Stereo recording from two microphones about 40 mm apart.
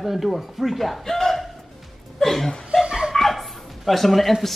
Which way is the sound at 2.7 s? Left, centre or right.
Right.